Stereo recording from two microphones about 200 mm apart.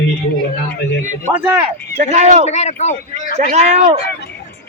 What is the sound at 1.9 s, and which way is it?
Speech, 35° right (ahead or behind).